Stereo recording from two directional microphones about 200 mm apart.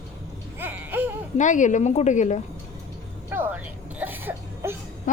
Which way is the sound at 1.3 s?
40° left (ahead or behind).